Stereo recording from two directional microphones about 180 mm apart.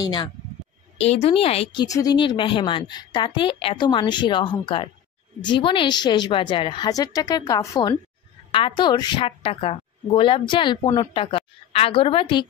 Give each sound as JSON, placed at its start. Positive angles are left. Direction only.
{"t": 0.0, "sound": "speech", "side_deg": 25}
{"t": 0.9, "sound": "speech", "side_deg": 35}